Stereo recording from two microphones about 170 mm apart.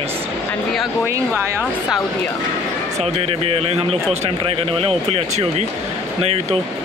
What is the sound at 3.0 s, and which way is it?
Speech, 35° right (ahead or behind).